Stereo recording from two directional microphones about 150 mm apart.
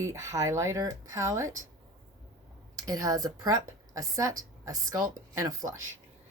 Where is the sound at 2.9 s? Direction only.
25° right (ahead or behind).